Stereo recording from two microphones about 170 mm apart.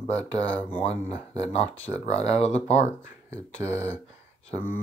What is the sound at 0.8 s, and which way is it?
Speech, 35° left (ahead or behind).